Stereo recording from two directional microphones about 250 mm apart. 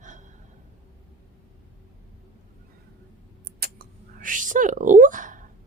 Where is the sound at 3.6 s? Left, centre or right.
Right.